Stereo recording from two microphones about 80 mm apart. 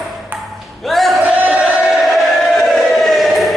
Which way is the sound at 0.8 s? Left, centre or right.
Centre.